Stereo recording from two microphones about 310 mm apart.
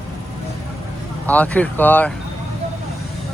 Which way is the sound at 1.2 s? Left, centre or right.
Centre.